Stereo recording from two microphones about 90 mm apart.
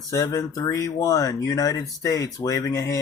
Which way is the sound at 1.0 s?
45° left (ahead or behind).